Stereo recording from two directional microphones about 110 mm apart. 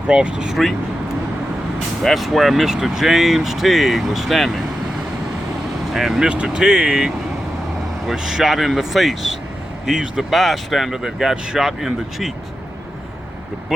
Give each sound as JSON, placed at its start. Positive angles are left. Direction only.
{"t": 0.1, "sound": "speech", "side_deg": -10}
{"t": 2.0, "sound": "speech", "side_deg": 0}
{"t": 5.9, "sound": "speech", "side_deg": -5}